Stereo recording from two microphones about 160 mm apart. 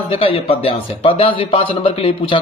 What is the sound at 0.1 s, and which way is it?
A man's voice, 35° left (ahead or behind).